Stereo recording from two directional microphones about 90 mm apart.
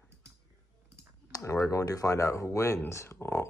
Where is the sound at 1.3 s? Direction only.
35° left (ahead or behind).